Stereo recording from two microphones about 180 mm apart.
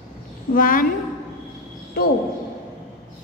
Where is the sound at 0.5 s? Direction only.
50° left (ahead or behind).